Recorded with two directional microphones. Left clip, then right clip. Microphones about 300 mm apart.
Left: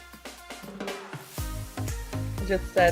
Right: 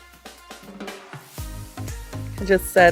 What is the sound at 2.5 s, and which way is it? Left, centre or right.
Speech, right.